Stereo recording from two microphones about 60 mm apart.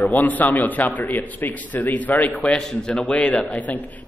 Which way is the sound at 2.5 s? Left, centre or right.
Centre.